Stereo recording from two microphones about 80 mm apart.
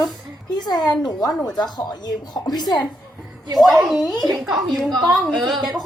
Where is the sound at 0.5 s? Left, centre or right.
Left.